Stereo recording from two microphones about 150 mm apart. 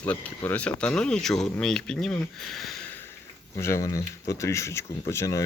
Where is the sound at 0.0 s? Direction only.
10° left (ahead or behind).